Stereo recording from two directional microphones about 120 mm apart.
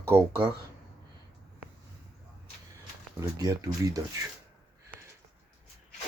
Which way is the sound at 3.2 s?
30° right (ahead or behind).